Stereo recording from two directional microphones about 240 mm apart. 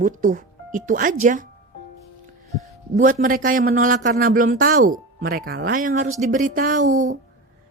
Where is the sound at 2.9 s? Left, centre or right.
Right.